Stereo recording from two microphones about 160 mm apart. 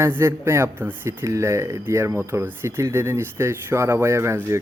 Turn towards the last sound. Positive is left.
turn(degrees=-15)  # may be behind; listen again after turning